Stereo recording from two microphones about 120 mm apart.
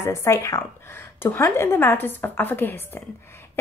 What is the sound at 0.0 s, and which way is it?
A woman's voice, 25° left (ahead or behind).